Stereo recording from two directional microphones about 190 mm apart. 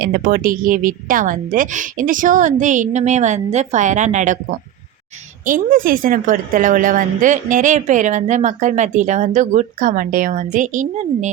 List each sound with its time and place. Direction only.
0.0 s a woman's voice: 50° right (ahead or behind)